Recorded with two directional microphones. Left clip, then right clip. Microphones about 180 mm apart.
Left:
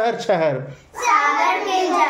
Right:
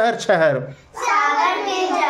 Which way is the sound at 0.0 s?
25° right (ahead or behind).